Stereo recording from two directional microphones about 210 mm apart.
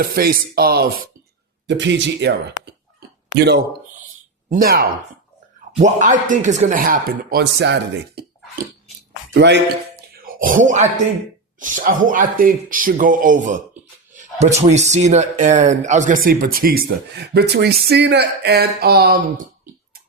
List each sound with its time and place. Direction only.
0.0 s speech: 45° right (ahead or behind)
1.6 s a man's voice: 60° right (ahead or behind)
3.3 s speech: 50° right (ahead or behind)
4.0 s a sound: 35° right (ahead or behind)
5.8 s speech: 35° right (ahead or behind); by 9.6 s 55° right (ahead or behind)
10.2 s a sound: 40° right (ahead or behind)
10.7 s speech: 35° right (ahead or behind)
14.6 s speech: 30° right (ahead or behind)